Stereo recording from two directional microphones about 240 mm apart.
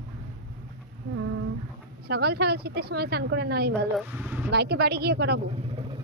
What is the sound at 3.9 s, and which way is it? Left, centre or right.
Speech, centre.